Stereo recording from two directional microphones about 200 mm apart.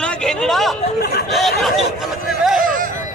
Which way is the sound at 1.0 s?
50° left (ahead or behind).